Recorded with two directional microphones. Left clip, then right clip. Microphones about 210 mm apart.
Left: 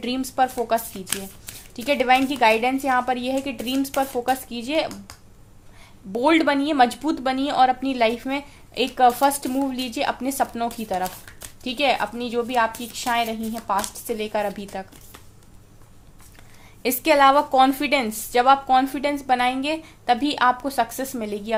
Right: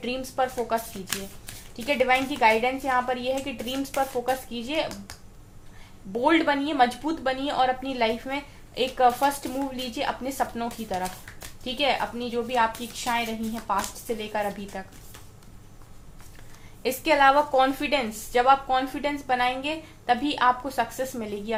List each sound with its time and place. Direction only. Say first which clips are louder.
0.0 s speech: left 5 dB; 55° left (ahead or behind)
6.1 s speech: left 3 dB; 50° left (ahead or behind)
16.8 s speech: left 3 dB; 55° left (ahead or behind)